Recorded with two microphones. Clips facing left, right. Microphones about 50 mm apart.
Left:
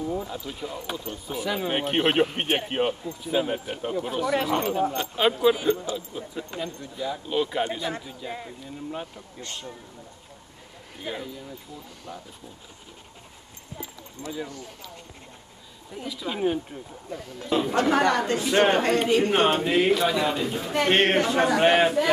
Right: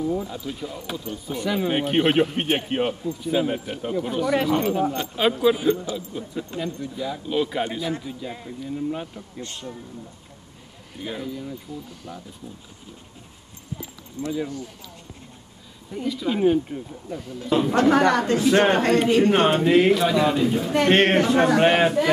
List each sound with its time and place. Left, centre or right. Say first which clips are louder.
0.0 s a man's voice: right 4 dB; centre
11.0 s a man's voice: right 2 dB; centre
14.2 s speech: right 7 dB; left
15.9 s a man's voice: right 7 dB; centre
18.8 s a man's voice: right 3 dB; centre